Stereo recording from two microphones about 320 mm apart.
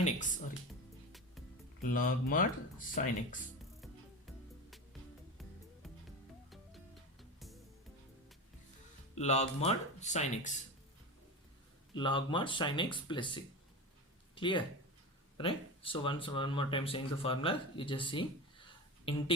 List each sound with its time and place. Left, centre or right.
0.0 s speech: left
1.8 s speech: left
6.5 s music: centre
9.1 s speech: left
11.9 s speech: centre